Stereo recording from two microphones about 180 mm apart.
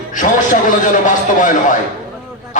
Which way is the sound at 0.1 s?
45° left (ahead or behind).